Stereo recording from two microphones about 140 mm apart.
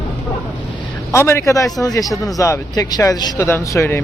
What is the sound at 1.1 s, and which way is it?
A man's voice, 20° left (ahead or behind).